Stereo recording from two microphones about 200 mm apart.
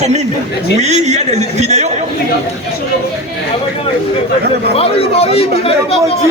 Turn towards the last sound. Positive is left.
turn(degrees=30)  # may be behind; listen again after turning